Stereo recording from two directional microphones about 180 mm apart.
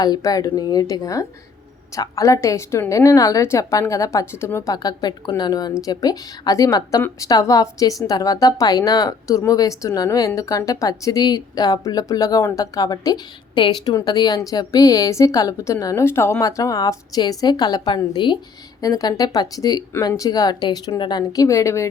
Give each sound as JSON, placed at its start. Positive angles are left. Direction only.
{"t": 0.0, "sound": "a woman's voice", "side_deg": 20}